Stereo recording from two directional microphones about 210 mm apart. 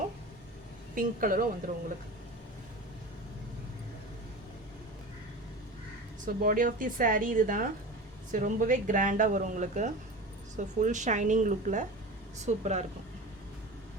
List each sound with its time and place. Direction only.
0.9 s speech: 40° right (ahead or behind)
6.2 s speech: 40° right (ahead or behind)